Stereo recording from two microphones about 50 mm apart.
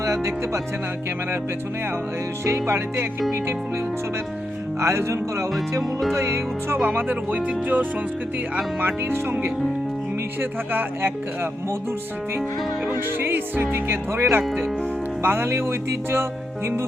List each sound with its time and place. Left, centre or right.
0.0 s speech: right
2.4 s music: right
4.8 s speech: right
6.8 s speech: right
10.7 s speech: right
12.9 s speech: right